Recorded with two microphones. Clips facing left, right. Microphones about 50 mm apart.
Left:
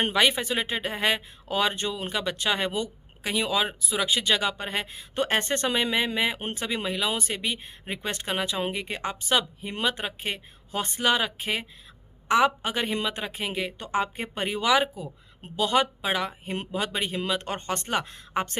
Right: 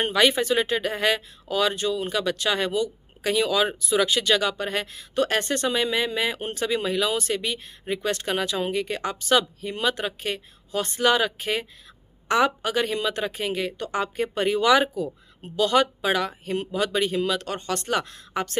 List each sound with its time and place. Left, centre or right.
0.1 s speech: centre
1.5 s speech: left
2.1 s speech: centre
3.6 s a woman's voice: centre
12.6 s speech: left